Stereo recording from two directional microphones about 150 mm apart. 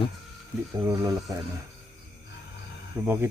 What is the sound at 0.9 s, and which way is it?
Speech, 25° right (ahead or behind).